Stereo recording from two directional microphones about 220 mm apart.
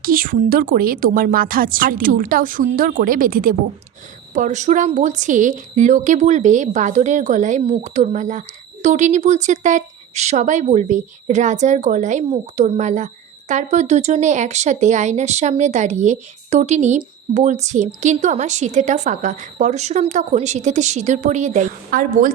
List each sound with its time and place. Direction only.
0.0 s speech: 40° right (ahead or behind)